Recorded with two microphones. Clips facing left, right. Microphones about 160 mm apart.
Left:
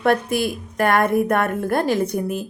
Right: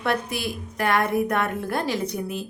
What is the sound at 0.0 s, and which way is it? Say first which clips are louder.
Speech: left 7 dB; 50° left (ahead or behind).